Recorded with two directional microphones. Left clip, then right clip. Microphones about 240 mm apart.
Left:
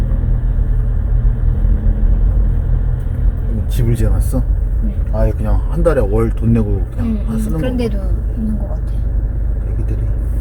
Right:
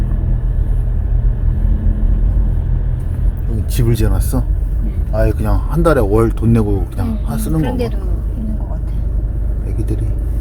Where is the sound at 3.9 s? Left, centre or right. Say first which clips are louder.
Right 3 dB; centre.